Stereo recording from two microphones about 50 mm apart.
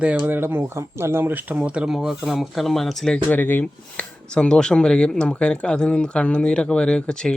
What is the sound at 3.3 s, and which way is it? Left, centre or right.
Speech, left.